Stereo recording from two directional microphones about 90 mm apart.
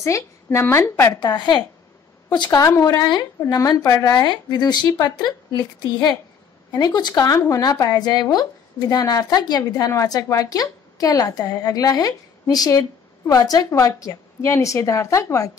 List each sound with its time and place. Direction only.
0.0 s a woman's voice: 30° left (ahead or behind)
1.2 s a woman's voice: 55° left (ahead or behind)
2.6 s a woman's voice: 45° left (ahead or behind)
7.3 s a woman's voice: 35° left (ahead or behind)